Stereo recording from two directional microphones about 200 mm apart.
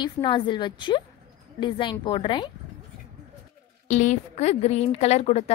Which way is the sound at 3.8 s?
35° left (ahead or behind).